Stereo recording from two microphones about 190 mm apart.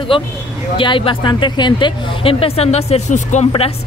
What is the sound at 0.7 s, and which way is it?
A woman's voice, 25° left (ahead or behind).